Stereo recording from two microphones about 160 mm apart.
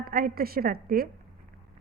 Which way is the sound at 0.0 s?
65° right (ahead or behind).